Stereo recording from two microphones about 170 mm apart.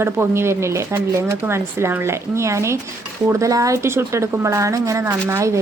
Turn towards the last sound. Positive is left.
turn(degrees=-15)  # may be behind; listen again after turning